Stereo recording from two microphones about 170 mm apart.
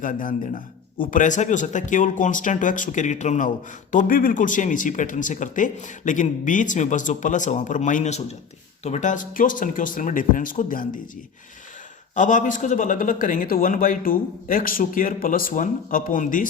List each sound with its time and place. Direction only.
0.0 s a man's voice: 50° left (ahead or behind)
12.1 s a man's voice: 50° left (ahead or behind)